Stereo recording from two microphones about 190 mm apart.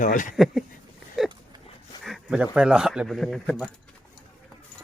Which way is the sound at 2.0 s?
Centre (ahead or behind).